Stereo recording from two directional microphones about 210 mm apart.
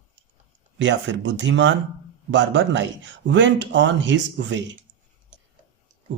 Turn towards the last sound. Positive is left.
turn(degrees=-60)  # may be behind; listen again after turning